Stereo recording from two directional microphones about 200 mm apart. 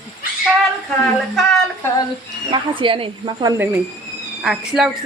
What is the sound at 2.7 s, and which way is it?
Speech, 25° right (ahead or behind).